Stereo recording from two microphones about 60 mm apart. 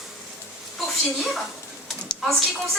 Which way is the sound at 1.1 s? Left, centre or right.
Centre.